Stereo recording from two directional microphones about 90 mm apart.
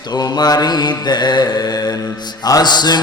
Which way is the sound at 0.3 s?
50° left (ahead or behind).